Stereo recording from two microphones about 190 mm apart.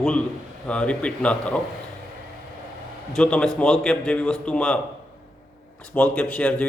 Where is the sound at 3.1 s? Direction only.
5° left (ahead or behind).